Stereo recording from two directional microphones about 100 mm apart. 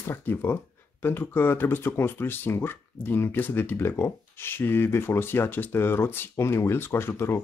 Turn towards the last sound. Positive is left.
turn(degrees=25)  # may be behind; listen again after turning